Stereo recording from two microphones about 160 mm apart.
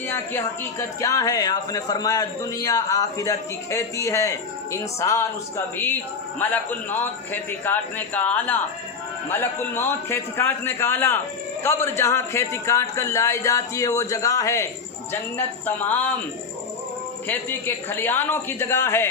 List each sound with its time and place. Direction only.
0.1 s a man's voice: 15° left (ahead or behind)
17.2 s a man's voice: 10° left (ahead or behind)